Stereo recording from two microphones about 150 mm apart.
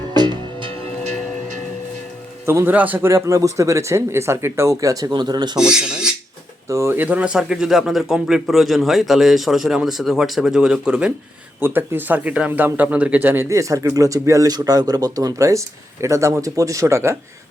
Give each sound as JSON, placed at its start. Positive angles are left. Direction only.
{"t": 0.1, "sound": "music", "side_deg": -30}
{"t": 2.5, "sound": "speech", "side_deg": -15}
{"t": 5.5, "sound": "speech", "side_deg": -5}
{"t": 6.7, "sound": "speech", "side_deg": -20}